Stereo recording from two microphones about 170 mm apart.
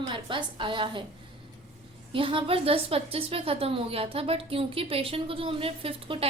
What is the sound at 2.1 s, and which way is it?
A woman's voice, 30° right (ahead or behind).